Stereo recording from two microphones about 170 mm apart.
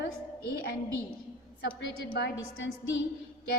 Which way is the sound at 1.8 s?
90° left.